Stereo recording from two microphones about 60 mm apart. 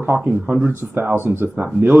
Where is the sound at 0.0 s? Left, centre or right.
Right.